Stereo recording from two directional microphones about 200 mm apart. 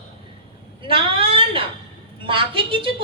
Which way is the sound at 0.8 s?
25° right (ahead or behind).